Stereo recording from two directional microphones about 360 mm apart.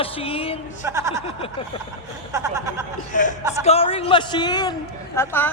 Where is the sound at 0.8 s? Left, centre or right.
Centre.